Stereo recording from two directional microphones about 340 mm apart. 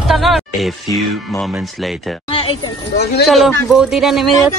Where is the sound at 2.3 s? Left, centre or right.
Centre.